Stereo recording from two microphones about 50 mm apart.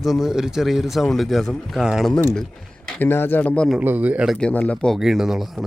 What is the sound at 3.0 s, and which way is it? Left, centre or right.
Speech, left.